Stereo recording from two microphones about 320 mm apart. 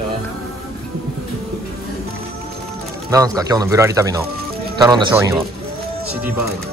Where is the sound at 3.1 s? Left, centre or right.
Centre.